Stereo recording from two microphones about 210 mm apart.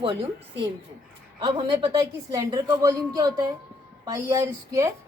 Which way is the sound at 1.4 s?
20° right (ahead or behind).